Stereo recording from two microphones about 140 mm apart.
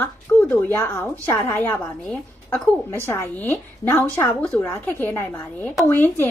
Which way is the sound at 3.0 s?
15° left (ahead or behind).